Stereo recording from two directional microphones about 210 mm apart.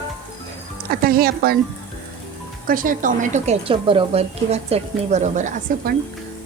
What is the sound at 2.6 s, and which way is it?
A woman's voice, 40° right (ahead or behind).